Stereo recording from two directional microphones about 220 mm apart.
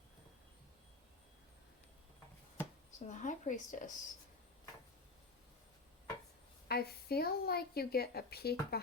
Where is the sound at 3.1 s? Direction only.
35° left (ahead or behind).